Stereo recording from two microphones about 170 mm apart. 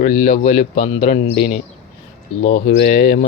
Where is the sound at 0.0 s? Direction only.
45° left (ahead or behind).